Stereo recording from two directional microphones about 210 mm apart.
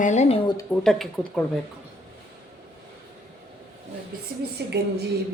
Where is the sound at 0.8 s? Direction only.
Centre (ahead or behind).